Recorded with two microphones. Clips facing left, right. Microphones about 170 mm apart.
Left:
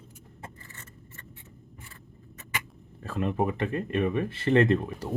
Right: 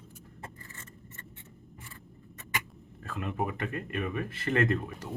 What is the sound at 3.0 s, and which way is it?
Speech, 35° left (ahead or behind).